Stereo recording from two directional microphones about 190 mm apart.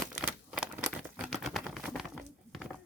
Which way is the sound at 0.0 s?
5° right (ahead or behind).